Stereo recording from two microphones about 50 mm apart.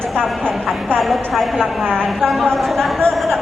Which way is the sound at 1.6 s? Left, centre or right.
Centre.